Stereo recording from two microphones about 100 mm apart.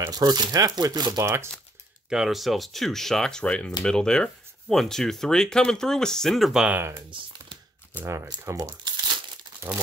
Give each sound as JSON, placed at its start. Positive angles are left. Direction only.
{"t": 0.1, "sound": "speech", "side_deg": -40}
{"t": 1.2, "sound": "speech", "side_deg": -25}
{"t": 2.0, "sound": "speech", "side_deg": -5}
{"t": 6.7, "sound": "speech", "side_deg": -25}
{"t": 8.0, "sound": "speech", "side_deg": -20}
{"t": 8.5, "sound": "speech", "side_deg": -30}
{"t": 8.8, "sound": "crumpling", "side_deg": -50}